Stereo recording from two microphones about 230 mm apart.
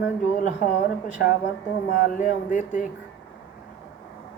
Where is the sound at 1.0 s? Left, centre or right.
Left.